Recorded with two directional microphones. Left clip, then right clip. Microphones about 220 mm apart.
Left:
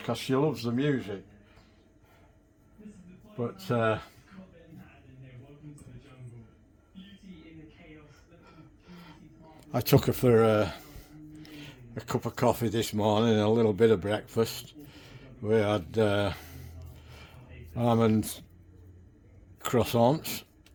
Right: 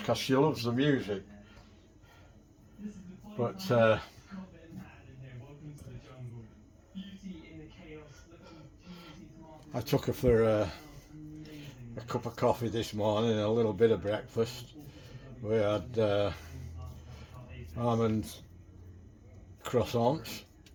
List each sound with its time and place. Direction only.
0.0 s speech: 35° left (ahead or behind)
3.7 s speech: 35° left (ahead or behind)
9.7 s speech: 50° left (ahead or behind)
11.6 s speech: 55° left (ahead or behind)
17.7 s speech: 55° left (ahead or behind)
19.6 s speech: 55° left (ahead or behind)